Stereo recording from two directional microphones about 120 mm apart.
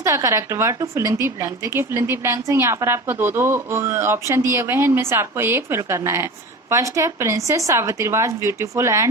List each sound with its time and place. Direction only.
0.0 s a woman's voice: 25° right (ahead or behind)